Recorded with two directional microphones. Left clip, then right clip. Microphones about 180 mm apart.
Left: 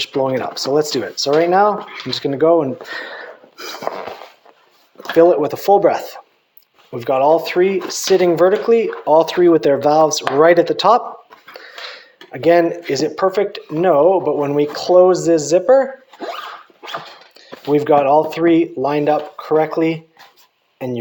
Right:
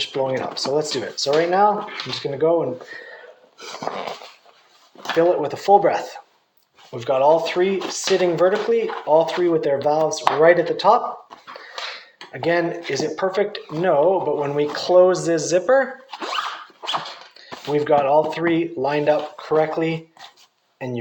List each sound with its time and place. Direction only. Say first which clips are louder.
0.0 s speech: left 4 dB; 50° left (ahead or behind); by 3.2 s 70° left (ahead or behind)
3.6 s speech: left 4 dB; 45° left (ahead or behind)
5.2 s speech: left 6 dB; 45° left (ahead or behind)
6.9 s speech: left 3 dB; 45° left (ahead or behind)
12.3 s speech: left 8 dB; 45° left (ahead or behind); by 15.9 s 30° left (ahead or behind)
17.7 s speech: left 5 dB; 40° left (ahead or behind)